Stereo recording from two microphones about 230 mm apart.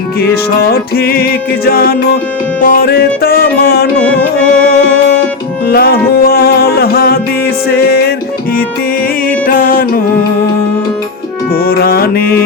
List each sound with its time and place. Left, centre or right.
0.2 s music: left
5.7 s music: left
9.5 s music: left
11.6 s music: left